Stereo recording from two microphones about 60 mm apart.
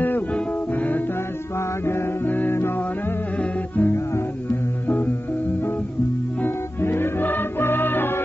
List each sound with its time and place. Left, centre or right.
2.2 s music: left
6.4 s music: left